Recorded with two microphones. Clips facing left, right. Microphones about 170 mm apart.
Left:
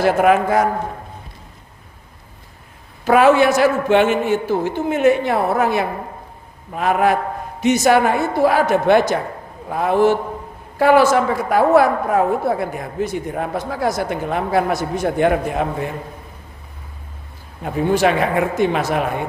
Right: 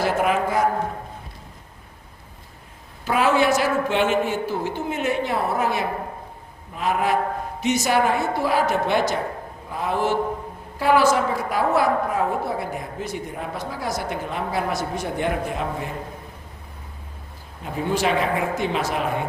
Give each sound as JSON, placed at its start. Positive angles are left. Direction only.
{"t": 0.0, "sound": "a man's voice", "side_deg": 60}
{"t": 3.1, "sound": "a man's voice", "side_deg": 60}
{"t": 17.6, "sound": "a man's voice", "side_deg": 60}